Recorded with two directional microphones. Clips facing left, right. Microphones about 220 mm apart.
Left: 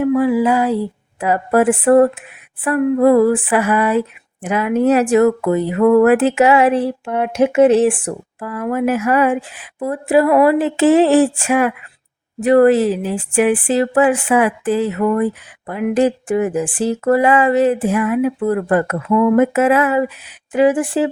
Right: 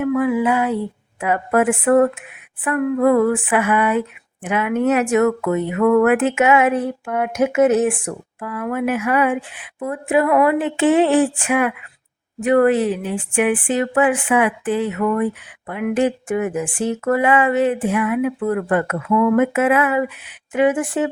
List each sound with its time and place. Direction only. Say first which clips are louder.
0.0 s speech: left 3 dB; 35° left (ahead or behind)